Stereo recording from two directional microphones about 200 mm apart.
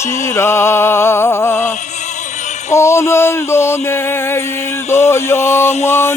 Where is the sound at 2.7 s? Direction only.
15° left (ahead or behind).